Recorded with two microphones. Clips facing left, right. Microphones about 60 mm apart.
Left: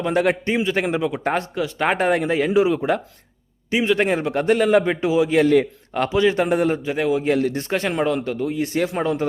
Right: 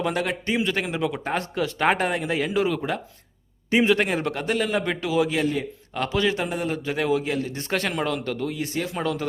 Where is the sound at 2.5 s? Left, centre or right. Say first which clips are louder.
Left 6 dB; centre.